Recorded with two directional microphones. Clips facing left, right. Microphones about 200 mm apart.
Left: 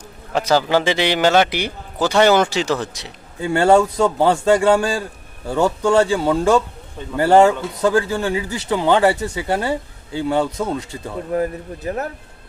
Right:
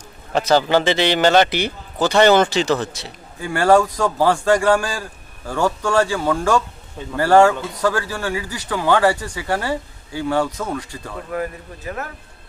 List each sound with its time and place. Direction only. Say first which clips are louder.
0.3 s a man's voice: right 1 dB; 10° left (ahead or behind)
11.3 s speech: left 5 dB; 35° left (ahead or behind)